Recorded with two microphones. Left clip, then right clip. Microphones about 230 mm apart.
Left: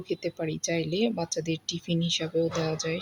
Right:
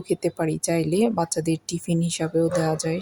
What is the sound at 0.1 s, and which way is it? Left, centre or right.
Speech, right.